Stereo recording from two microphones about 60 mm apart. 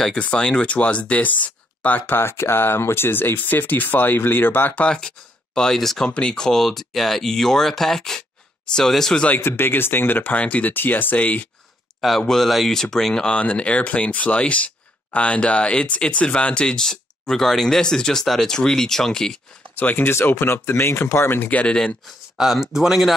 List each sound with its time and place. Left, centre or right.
0.1 s speech: centre
4.8 s speech: centre
9.4 s speech: left
12.2 s speech: centre
19.7 s speech: left
20.1 s speech: left
21.4 s speech: left
22.4 s speech: centre